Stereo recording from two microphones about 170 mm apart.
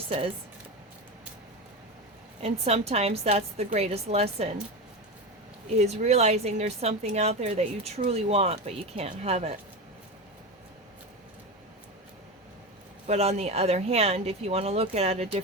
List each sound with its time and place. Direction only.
2.4 s speech: 40° right (ahead or behind)
5.6 s speech: 40° right (ahead or behind)
13.1 s speech: 40° right (ahead or behind)